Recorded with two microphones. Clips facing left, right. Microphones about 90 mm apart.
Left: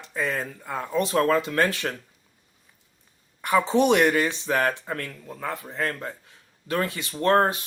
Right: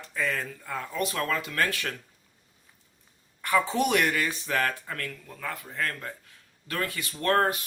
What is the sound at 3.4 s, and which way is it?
Speech, 20° left (ahead or behind).